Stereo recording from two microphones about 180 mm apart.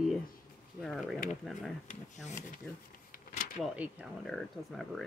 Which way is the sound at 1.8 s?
40° left (ahead or behind).